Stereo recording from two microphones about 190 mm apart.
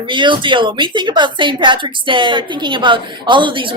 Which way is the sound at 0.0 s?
25° right (ahead or behind).